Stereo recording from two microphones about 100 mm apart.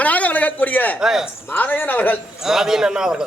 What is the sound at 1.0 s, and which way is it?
Speech, 5° right (ahead or behind).